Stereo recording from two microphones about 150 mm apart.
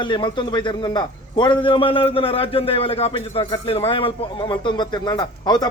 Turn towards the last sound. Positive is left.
turn(degrees=30)  # may be behind; listen again after turning